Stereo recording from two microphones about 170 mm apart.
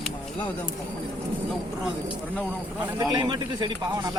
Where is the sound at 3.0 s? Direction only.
25° right (ahead or behind).